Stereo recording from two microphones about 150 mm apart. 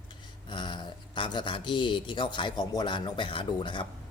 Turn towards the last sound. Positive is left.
turn(degrees=35)  # may be behind; listen again after turning